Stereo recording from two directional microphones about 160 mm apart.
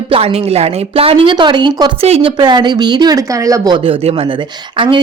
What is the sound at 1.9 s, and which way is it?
Speech, 40° right (ahead or behind).